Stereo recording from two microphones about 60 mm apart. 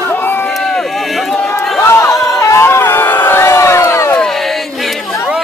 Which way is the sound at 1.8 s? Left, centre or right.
Left.